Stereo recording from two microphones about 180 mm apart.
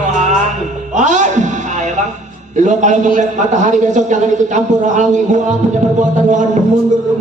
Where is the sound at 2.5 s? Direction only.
45° right (ahead or behind).